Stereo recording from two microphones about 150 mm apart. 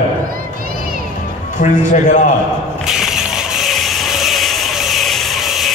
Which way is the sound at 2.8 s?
Centre (ahead or behind).